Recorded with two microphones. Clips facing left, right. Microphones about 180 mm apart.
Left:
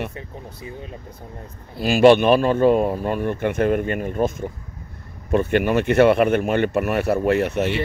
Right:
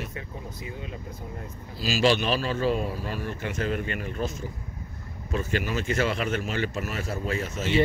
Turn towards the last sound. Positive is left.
turn(degrees=65)  # may be behind; listen again after turning